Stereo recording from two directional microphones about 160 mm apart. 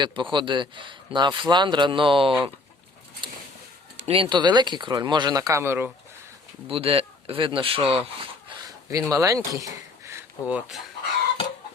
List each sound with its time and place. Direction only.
0.0 s speech: 30° right (ahead or behind)
4.0 s speech: 35° right (ahead or behind); by 5.9 s 15° right (ahead or behind)
6.7 s speech: 35° right (ahead or behind)
8.6 s speech: 20° right (ahead or behind); by 10.8 s 5° right (ahead or behind)